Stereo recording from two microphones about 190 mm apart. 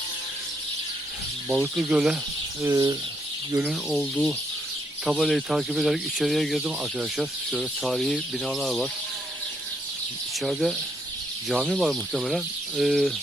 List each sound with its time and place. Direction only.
1.5 s speech: 10° right (ahead or behind)
2.6 s bird: 20° right (ahead or behind)
3.5 s speech: 5° right (ahead or behind)
10.4 s speech: centre (ahead or behind)